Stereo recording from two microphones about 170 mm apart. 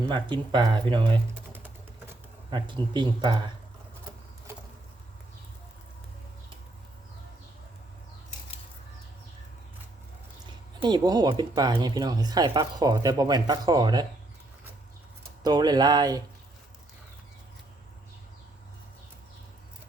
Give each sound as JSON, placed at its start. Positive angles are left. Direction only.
{"t": 0.1, "sound": "speech", "side_deg": -25}
{"t": 2.5, "sound": "speech", "side_deg": -25}
{"t": 10.8, "sound": "speech", "side_deg": -25}
{"t": 15.4, "sound": "speech", "side_deg": -25}